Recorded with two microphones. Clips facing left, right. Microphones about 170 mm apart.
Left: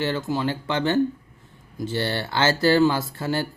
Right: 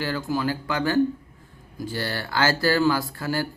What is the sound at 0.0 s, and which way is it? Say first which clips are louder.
Speech: left 1 dB; 25° left (ahead or behind).